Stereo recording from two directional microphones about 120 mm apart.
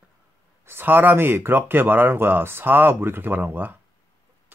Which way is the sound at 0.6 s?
15° right (ahead or behind).